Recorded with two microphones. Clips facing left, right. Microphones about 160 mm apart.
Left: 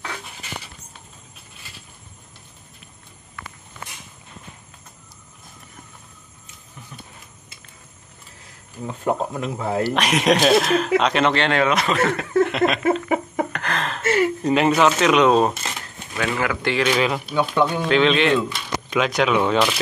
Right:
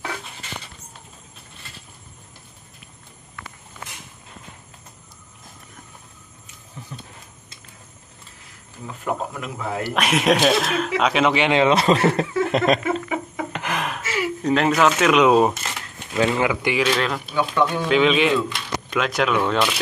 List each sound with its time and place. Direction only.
8.8 s speech: 30° left (ahead or behind)
9.9 s speech: 5° right (ahead or behind)
11.7 s speech: 30° right (ahead or behind)
12.4 s a sound: 40° right (ahead or behind)
13.5 s a sound: 15° right (ahead or behind)
14.0 s speech: 50° left (ahead or behind)
14.4 s speech: 5° left (ahead or behind)
15.5 s a sound: 15° left (ahead or behind)
16.2 s speech: 20° right (ahead or behind)
16.9 s speech: 5° left (ahead or behind)
17.4 s speech: 25° left (ahead or behind)
17.8 s speech: 5° right (ahead or behind)